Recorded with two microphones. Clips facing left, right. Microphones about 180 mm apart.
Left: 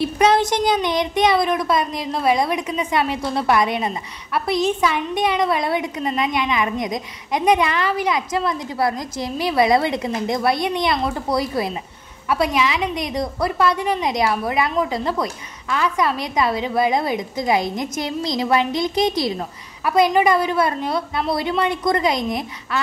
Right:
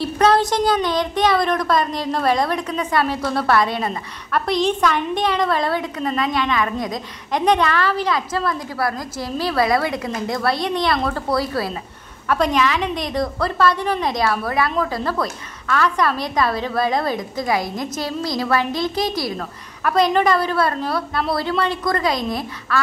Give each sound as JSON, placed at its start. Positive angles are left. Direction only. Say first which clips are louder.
{"t": 0.0, "sound": "a woman's voice", "louder": "even", "side_deg": 15}
{"t": 4.5, "sound": "a woman's voice", "louder": "even", "side_deg": 5}